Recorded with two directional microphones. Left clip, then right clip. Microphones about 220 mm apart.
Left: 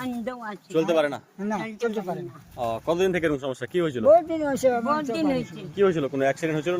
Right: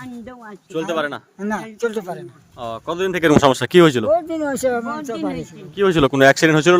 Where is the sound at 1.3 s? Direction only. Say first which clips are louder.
Right 4 dB; 50° right (ahead or behind).